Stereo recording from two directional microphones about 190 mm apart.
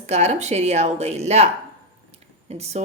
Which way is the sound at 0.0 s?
35° right (ahead or behind).